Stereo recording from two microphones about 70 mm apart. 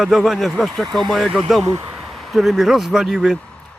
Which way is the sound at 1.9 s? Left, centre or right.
Centre.